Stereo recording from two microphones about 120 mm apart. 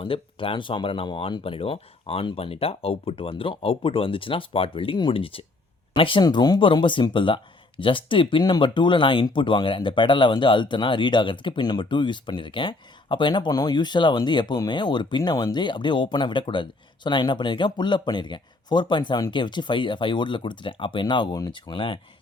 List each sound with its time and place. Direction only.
0.0 s speech: 50° left (ahead or behind)